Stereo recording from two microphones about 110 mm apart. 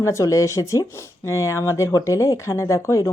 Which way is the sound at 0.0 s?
30° left (ahead or behind).